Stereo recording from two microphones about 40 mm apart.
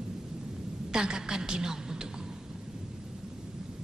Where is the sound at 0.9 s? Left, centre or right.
Centre.